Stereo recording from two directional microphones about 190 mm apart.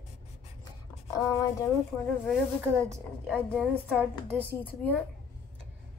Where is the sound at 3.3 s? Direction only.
5° left (ahead or behind).